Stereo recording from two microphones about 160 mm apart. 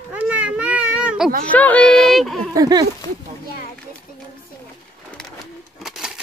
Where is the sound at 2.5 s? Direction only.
25° right (ahead or behind).